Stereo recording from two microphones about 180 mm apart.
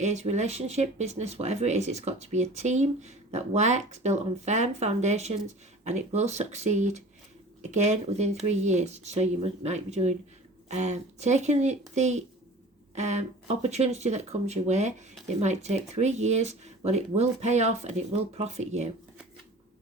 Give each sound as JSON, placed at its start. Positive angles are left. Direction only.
{"t": 0.0, "sound": "speech", "side_deg": -40}